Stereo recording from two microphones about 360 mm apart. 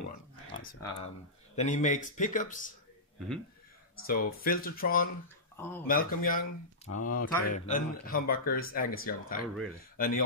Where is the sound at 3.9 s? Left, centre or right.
Left.